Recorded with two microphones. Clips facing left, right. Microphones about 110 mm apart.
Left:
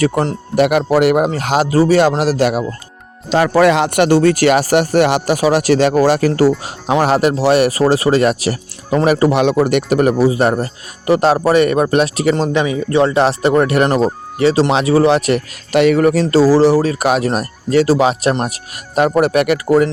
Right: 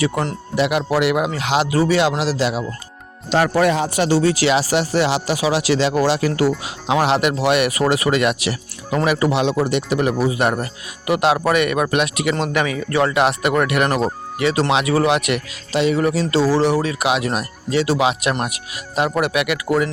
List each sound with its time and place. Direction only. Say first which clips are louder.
0.0 s speech: left 5 dB; 35° left (ahead or behind)
0.5 s speech: left 6 dB; 50° left (ahead or behind)
3.5 s speech: left 6 dB; 90° left; by 9.3 s 35° left (ahead or behind)
9.3 s speech: left 5 dB; 55° left (ahead or behind); by 12.5 s 35° left (ahead or behind)
12.5 s speech: left 5 dB; 25° left (ahead or behind)
15.7 s speech: left 6 dB; 60° left (ahead or behind)
16.2 s speech: left 7 dB; 40° left (ahead or behind)